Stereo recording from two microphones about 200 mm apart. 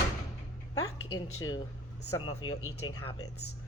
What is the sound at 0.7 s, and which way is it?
Speech, 20° left (ahead or behind).